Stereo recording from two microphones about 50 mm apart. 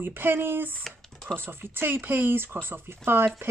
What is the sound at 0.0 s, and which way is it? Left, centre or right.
Speech, right.